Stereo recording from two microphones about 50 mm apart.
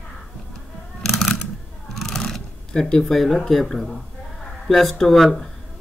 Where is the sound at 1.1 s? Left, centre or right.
Centre.